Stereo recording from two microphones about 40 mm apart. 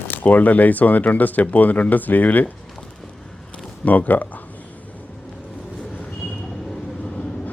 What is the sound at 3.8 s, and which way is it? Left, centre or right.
Speech, left.